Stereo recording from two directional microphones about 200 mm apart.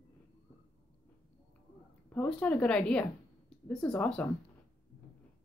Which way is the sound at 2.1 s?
5° left (ahead or behind).